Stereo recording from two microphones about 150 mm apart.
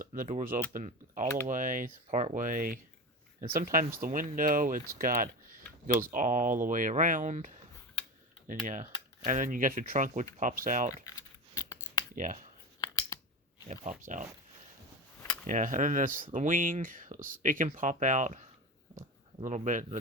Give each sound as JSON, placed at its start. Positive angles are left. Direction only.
{"t": 0.0, "sound": "speech", "side_deg": -65}
{"t": 3.4, "sound": "speech", "side_deg": -75}
{"t": 11.0, "sound": "scissors", "side_deg": 25}
{"t": 12.1, "sound": "speech", "side_deg": -60}
{"t": 12.8, "sound": "scissors", "side_deg": 25}
{"t": 14.0, "sound": "speech", "side_deg": -60}
{"t": 15.4, "sound": "speech", "side_deg": -60}
{"t": 19.5, "sound": "speech", "side_deg": -55}